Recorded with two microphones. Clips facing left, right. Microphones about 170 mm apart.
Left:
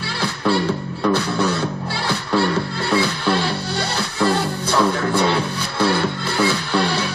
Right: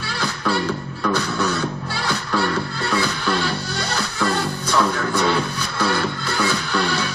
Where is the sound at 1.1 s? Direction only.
30° left (ahead or behind).